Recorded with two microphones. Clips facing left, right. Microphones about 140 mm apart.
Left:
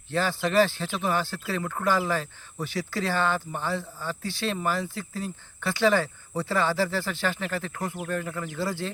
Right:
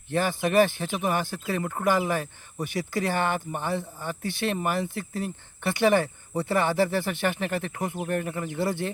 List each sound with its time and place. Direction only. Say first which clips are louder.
0.1 s speech: right 1 dB; 20° right (ahead or behind)